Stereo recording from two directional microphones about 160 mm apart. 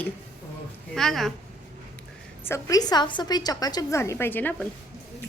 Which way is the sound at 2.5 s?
20° left (ahead or behind).